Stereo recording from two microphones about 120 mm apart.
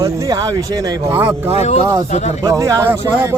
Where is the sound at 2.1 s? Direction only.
75° left (ahead or behind).